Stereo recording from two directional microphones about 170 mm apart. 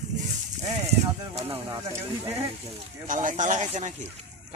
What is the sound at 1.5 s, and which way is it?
Speech, 20° right (ahead or behind).